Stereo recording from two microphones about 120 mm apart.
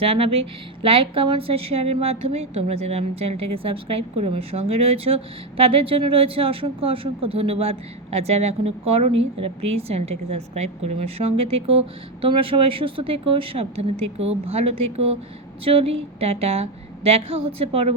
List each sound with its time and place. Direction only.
0.0 s a woman's voice: 50° right (ahead or behind)